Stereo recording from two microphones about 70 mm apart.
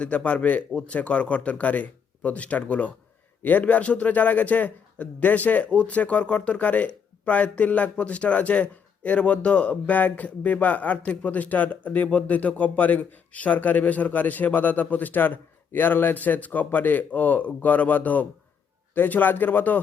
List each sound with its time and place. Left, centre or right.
0.0 s a man's voice: centre